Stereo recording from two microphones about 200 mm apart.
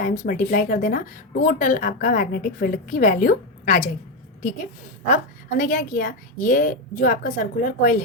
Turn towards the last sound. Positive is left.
turn(degrees=40)  # may be behind; listen again after turning